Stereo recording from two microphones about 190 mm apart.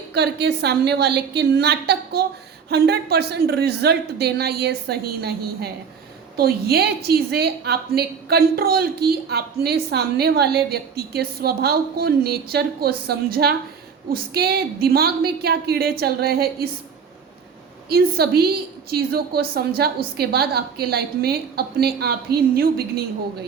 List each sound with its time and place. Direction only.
0.1 s a woman's voice: 60° right (ahead or behind)
6.3 s a woman's voice: 55° right (ahead or behind)
17.8 s a woman's voice: 55° right (ahead or behind)